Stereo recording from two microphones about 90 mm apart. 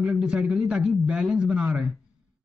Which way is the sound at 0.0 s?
10° right (ahead or behind).